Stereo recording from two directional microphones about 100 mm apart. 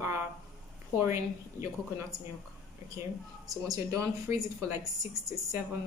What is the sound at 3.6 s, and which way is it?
A woman's voice, 35° right (ahead or behind).